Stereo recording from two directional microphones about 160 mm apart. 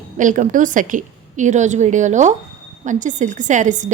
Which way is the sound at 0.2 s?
55° right (ahead or behind).